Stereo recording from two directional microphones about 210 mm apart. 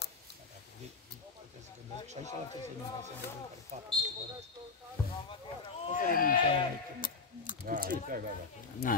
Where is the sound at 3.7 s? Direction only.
35° right (ahead or behind).